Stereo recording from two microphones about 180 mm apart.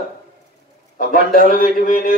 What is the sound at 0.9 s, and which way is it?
Speech, 50° left (ahead or behind).